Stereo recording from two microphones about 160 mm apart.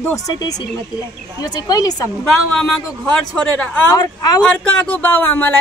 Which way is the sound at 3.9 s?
25° left (ahead or behind).